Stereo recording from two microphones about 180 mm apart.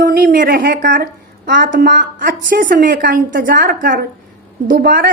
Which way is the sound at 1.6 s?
50° right (ahead or behind).